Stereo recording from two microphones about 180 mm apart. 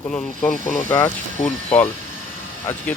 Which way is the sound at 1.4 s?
40° left (ahead or behind).